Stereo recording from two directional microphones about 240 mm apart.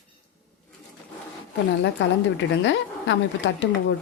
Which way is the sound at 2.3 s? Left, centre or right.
Left.